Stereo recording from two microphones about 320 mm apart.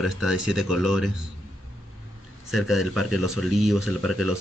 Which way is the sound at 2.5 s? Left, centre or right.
Centre.